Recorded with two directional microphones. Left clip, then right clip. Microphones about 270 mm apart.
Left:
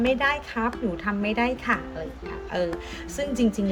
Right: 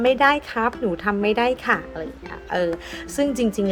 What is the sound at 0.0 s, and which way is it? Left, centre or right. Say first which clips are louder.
Speech: right 6 dB; centre.